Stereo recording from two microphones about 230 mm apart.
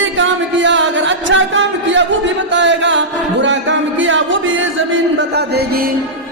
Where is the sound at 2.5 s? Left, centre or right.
Right.